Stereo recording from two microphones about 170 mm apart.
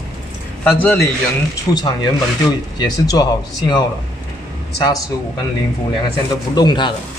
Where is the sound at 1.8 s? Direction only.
25° left (ahead or behind).